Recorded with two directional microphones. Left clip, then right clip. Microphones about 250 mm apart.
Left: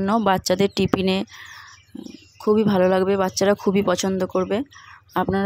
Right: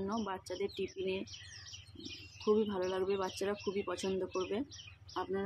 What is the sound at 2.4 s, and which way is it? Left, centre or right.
Speech, left.